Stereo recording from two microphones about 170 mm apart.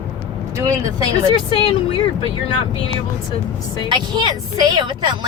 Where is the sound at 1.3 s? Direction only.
30° left (ahead or behind).